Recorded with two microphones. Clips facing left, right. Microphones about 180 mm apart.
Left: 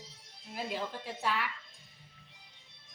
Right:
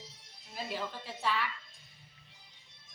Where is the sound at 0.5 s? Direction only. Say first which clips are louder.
Left 2 dB; 15° left (ahead or behind).